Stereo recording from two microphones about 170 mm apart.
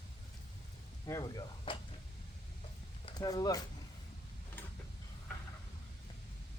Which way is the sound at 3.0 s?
20° left (ahead or behind).